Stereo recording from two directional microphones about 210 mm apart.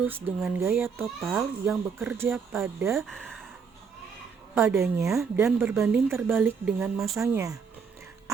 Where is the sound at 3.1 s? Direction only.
Centre (ahead or behind).